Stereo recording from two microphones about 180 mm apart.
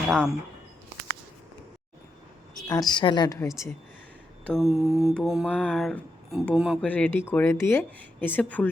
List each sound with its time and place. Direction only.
0.1 s mantra: 5° left (ahead or behind)
2.6 s a woman's voice: 20° left (ahead or behind)
4.4 s mantra: centre (ahead or behind)
6.8 s speech: 10° left (ahead or behind)